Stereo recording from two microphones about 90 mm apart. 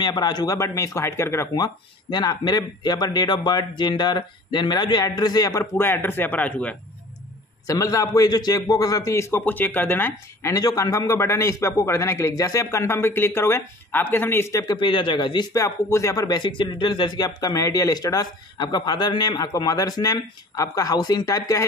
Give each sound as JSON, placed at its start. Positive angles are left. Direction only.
{"t": 0.0, "sound": "a man's voice", "side_deg": 50}
{"t": 1.5, "sound": "speech", "side_deg": 50}
{"t": 7.6, "sound": "a man's voice", "side_deg": 40}
{"t": 9.3, "sound": "speech", "side_deg": 20}
{"t": 10.5, "sound": "a man's voice", "side_deg": 40}
{"t": 14.8, "sound": "a man's voice", "side_deg": 70}
{"t": 15.5, "sound": "speech", "side_deg": 35}